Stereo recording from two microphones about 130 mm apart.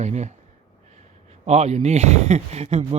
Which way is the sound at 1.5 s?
60° right (ahead or behind).